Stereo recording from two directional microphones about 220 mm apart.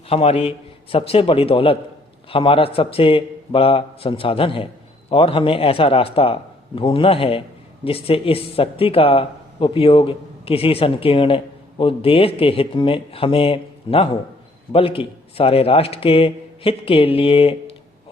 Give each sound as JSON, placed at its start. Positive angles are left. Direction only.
{"t": 0.1, "sound": "speech", "side_deg": 25}